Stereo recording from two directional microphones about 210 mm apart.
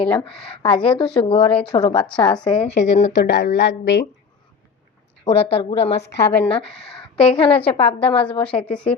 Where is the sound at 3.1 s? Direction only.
55° left (ahead or behind).